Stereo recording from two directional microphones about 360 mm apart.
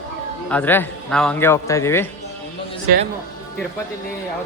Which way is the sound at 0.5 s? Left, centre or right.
Centre.